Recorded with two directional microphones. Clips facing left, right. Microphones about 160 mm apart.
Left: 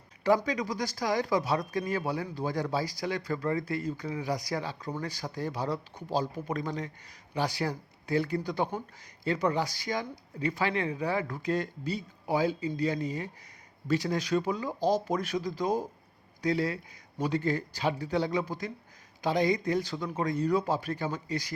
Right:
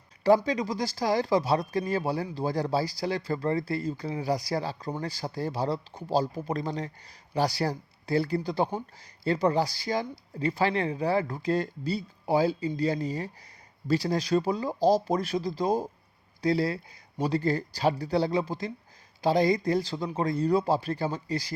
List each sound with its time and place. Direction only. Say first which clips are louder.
0.3 s speech: right 4 dB; 30° right (ahead or behind)